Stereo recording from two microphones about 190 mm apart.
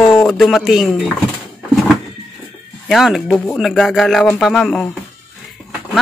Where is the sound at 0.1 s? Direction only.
Centre (ahead or behind).